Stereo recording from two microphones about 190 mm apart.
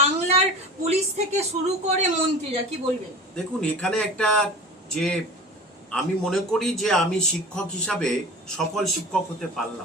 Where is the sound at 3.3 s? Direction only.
5° left (ahead or behind).